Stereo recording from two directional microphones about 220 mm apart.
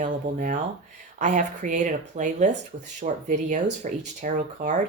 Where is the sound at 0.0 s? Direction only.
35° right (ahead or behind).